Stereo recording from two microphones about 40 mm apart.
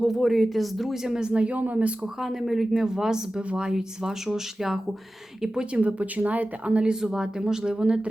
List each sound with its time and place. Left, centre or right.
0.0 s speech: centre
1.0 s speech: centre; by 1.9 s right
2.2 s speech: centre
2.8 s speech: centre
5.5 s speech: right
7.0 s speech: centre